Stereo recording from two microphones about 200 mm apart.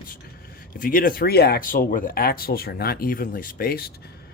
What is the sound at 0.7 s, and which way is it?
Speech, 45° left (ahead or behind).